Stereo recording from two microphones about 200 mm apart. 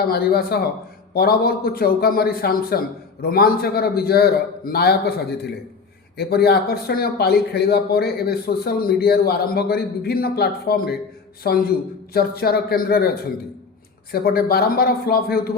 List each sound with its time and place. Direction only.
0.1 s speech: 50° left (ahead or behind)
14.1 s speech: 50° left (ahead or behind)